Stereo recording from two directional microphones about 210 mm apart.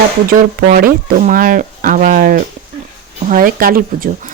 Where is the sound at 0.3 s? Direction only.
45° right (ahead or behind).